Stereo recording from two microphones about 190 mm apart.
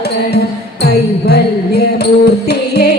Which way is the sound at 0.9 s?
55° left (ahead or behind).